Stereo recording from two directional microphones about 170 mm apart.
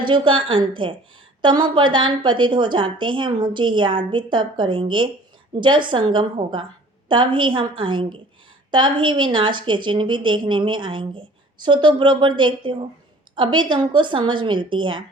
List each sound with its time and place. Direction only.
0.0 s a woman's voice: 30° right (ahead or behind)